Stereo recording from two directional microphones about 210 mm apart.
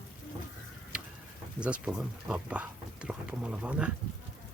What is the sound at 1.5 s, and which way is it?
Speech, 5° right (ahead or behind).